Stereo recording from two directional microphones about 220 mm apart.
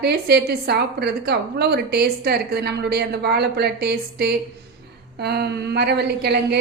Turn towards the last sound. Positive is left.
turn(degrees=-50)  # may be behind; listen again after turning